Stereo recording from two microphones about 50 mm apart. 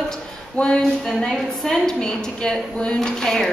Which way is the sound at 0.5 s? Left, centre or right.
Centre.